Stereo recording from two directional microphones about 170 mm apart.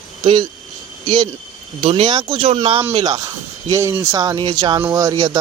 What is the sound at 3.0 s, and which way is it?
Speech, 20° right (ahead or behind).